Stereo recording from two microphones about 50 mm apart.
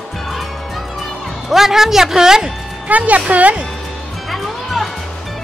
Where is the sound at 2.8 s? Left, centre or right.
Right.